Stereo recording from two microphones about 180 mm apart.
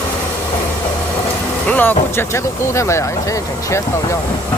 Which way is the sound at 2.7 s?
15° left (ahead or behind).